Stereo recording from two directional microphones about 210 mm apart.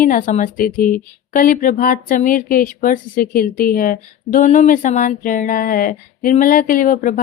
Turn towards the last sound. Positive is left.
turn(degrees=40)  # may be behind; listen again after turning